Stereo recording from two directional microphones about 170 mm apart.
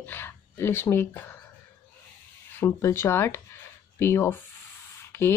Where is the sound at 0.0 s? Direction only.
10° left (ahead or behind).